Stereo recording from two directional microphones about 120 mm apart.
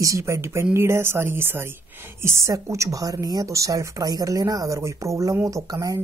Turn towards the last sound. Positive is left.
turn(degrees=-30)  # may be behind; listen again after turning